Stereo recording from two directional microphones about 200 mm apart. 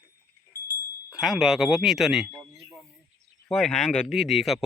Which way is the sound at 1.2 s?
Centre (ahead or behind).